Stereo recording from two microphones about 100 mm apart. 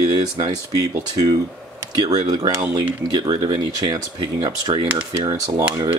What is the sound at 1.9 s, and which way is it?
Speech, 45° right (ahead or behind).